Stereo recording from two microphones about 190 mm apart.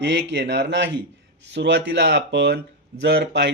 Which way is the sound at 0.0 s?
65° right (ahead or behind).